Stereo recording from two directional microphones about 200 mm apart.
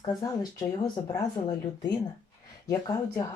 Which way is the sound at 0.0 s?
20° left (ahead or behind).